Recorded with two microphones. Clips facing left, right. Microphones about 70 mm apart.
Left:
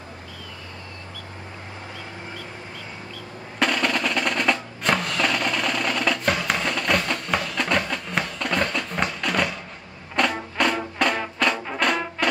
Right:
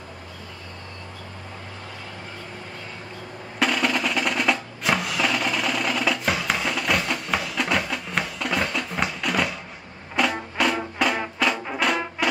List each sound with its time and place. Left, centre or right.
3.5 s percussion: centre
10.1 s music: centre